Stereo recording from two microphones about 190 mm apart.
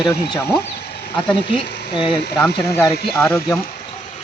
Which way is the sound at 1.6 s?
60° left (ahead or behind).